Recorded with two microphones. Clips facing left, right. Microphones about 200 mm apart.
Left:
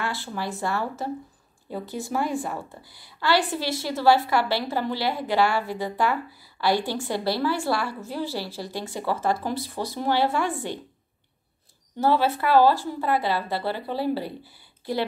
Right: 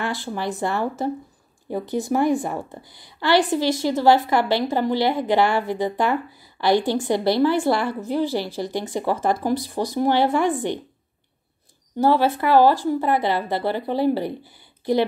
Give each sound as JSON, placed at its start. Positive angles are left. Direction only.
{"t": 0.0, "sound": "a sound", "side_deg": -15}
{"t": 0.4, "sound": "a woman's voice", "side_deg": -20}
{"t": 12.0, "sound": "a woman's voice", "side_deg": -15}